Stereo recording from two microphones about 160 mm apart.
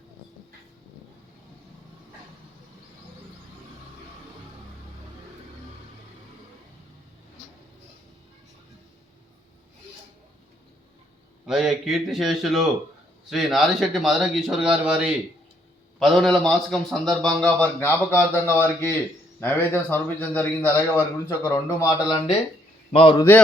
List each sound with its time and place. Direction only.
11.4 s a man's voice: centre (ahead or behind); by 22.2 s 20° left (ahead or behind)
22.9 s a man's voice: 35° left (ahead or behind)